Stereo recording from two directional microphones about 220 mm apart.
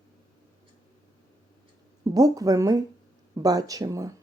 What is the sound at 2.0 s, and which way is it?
A woman's voice, 15° right (ahead or behind).